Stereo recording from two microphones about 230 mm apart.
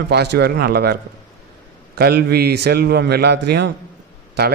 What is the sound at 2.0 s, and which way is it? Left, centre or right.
A man's voice, right.